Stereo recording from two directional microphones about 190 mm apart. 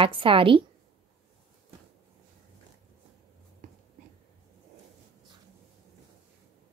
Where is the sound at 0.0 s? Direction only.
25° right (ahead or behind).